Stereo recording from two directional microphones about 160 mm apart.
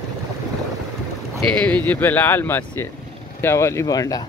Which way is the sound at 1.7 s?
10° left (ahead or behind).